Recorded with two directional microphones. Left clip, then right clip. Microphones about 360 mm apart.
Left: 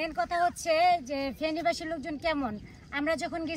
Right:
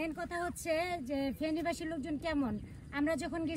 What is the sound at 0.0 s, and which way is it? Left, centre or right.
Speech, centre.